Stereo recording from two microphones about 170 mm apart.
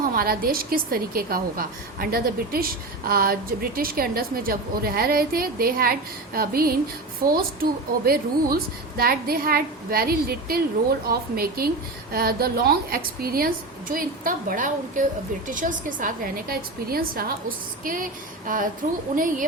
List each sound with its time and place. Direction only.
0.0 s a woman's voice: 60° right (ahead or behind)
18.4 s speech: 50° right (ahead or behind)